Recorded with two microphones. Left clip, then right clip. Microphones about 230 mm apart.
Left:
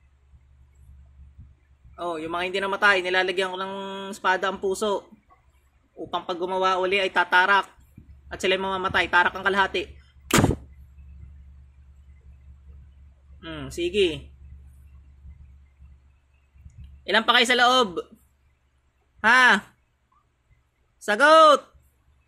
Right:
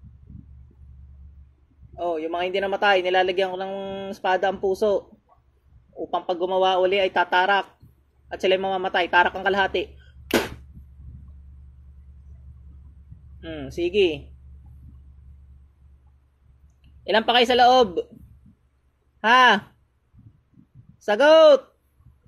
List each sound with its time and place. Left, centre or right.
2.0 s speech: left
6.0 s speech: left
13.4 s speech: left
17.1 s speech: left
19.2 s speech: left
21.0 s speech: left